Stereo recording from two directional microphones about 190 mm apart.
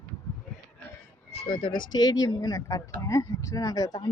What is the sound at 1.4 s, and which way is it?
Speech, 25° left (ahead or behind).